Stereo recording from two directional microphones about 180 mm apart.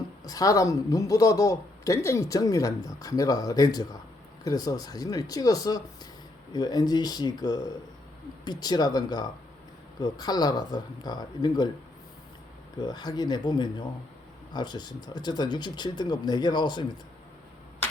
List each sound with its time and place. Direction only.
0.3 s a man's voice: 20° left (ahead or behind)
12.8 s a man's voice: 25° left (ahead or behind)